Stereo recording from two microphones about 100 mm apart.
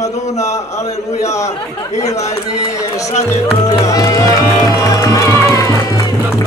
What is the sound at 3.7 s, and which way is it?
Music, 35° left (ahead or behind).